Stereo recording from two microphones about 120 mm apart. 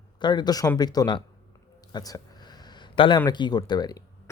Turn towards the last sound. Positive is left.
turn(degrees=35)  # may be behind; listen again after turning